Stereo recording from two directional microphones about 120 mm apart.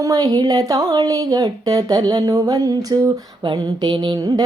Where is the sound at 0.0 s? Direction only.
30° right (ahead or behind).